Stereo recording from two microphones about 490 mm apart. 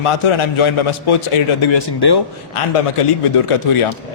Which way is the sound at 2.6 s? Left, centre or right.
Left.